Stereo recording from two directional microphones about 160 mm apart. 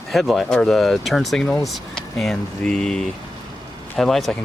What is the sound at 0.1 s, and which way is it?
Speech, centre (ahead or behind).